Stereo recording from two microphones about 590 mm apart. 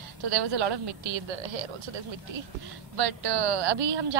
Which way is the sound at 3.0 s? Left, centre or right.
Right.